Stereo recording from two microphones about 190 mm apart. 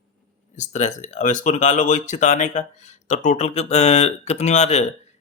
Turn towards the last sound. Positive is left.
turn(degrees=35)  # may be behind; listen again after turning